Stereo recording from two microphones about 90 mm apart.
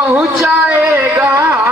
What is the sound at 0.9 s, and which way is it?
Music, 30° right (ahead or behind).